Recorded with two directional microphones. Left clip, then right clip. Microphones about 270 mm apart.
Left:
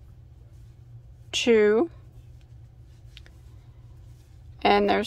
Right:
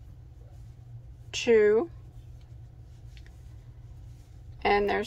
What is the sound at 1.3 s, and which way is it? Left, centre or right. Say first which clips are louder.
Speech: left 2 dB; left.